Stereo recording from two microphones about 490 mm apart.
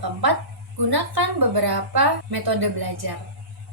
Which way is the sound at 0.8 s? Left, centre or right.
Right.